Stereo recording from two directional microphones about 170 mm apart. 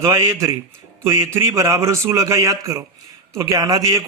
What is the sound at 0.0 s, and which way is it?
A man's voice, 20° right (ahead or behind).